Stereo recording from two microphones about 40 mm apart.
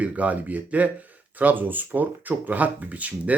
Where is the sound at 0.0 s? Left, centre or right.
Right.